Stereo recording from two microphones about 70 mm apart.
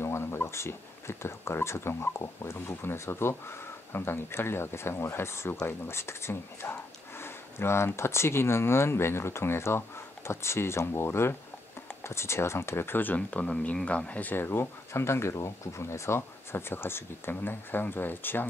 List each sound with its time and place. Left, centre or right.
0.0 s speech: left